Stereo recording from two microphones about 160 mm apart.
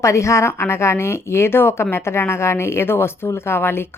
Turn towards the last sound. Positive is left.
turn(degrees=15)  # may be behind; listen again after turning